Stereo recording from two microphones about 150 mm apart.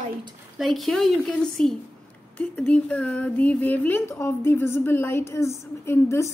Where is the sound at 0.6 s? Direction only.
Centre (ahead or behind).